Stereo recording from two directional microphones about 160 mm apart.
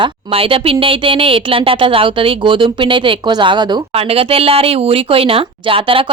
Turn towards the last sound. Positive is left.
turn(degrees=-35)  # may be behind; listen again after turning